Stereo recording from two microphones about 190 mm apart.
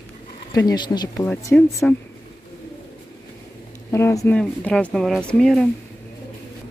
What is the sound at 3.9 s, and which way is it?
Speech, 15° left (ahead or behind).